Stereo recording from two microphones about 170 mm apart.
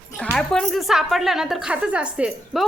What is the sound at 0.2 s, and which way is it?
A woman's voice, 5° left (ahead or behind).